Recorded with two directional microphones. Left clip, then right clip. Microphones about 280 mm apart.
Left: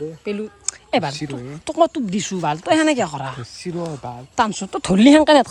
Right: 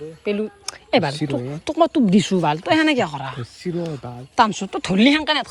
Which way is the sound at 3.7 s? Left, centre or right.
Centre.